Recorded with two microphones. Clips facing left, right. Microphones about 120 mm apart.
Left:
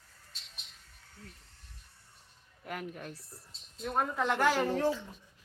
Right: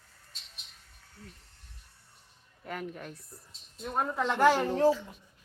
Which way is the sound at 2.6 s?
5° left (ahead or behind).